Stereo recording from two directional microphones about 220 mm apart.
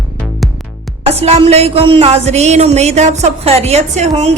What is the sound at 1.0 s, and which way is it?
A woman's voice, 30° right (ahead or behind).